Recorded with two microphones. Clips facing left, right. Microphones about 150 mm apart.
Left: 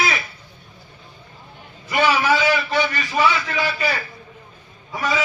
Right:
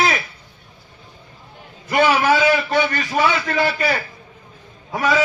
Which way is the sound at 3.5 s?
50° right (ahead or behind).